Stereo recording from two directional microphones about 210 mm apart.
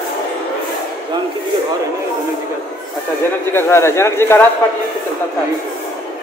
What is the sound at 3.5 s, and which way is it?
Speech, 10° left (ahead or behind).